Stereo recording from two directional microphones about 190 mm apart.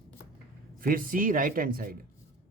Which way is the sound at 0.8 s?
50° right (ahead or behind).